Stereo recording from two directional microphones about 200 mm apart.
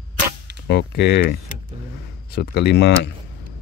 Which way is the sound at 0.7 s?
55° left (ahead or behind).